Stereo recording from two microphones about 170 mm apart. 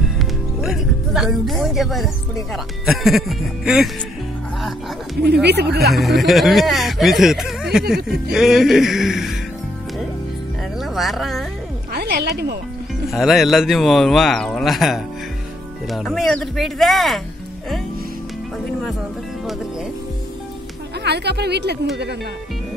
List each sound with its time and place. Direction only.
0.2 s music: centre (ahead or behind)
2.5 s speech: centre (ahead or behind)
5.2 s a woman's voice: 75° right (ahead or behind)
5.9 s speech: centre (ahead or behind)
10.8 s a sound: centre (ahead or behind)
11.9 s music: 70° right (ahead or behind)
13.1 s speech: centre (ahead or behind)
21.0 s a woman's voice: 80° right